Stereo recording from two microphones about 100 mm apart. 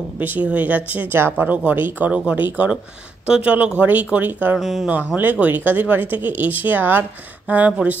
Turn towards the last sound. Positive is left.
turn(degrees=-15)  # may be behind; listen again after turning